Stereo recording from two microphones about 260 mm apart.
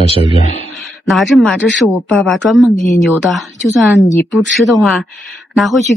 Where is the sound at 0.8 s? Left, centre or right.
Centre.